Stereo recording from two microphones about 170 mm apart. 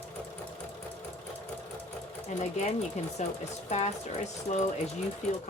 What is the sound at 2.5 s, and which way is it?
Speech, 40° left (ahead or behind).